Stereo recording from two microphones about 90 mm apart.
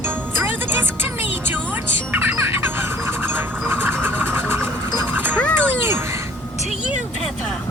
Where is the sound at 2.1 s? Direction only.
20° right (ahead or behind).